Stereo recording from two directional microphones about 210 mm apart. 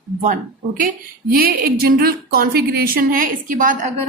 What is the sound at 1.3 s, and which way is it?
A woman's voice, 45° right (ahead or behind).